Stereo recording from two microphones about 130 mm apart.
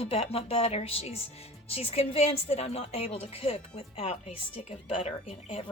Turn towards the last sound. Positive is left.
turn(degrees=50)  # may be behind; listen again after turning